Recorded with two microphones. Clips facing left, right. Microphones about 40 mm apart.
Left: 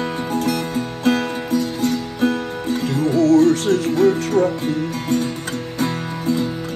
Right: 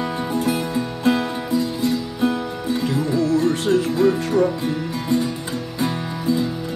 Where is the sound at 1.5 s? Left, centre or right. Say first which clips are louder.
Left 1 dB; left.